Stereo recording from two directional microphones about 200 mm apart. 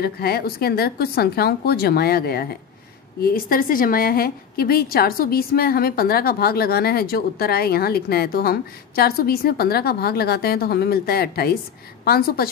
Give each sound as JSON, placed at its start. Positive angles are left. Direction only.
{"t": 0.0, "sound": "a woman's voice", "side_deg": 50}